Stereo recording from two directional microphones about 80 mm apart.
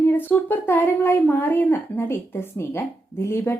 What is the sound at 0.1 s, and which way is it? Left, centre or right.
Speech, left.